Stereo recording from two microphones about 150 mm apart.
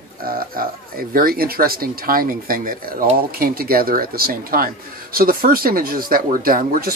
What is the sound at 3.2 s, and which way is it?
Speech, 80° right.